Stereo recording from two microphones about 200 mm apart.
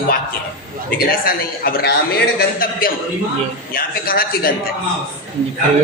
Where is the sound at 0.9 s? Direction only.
45° left (ahead or behind).